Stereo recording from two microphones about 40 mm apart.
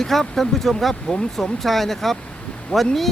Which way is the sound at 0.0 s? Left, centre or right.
Centre.